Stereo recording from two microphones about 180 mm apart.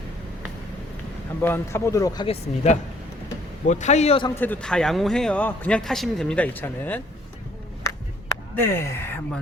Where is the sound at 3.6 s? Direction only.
40° left (ahead or behind).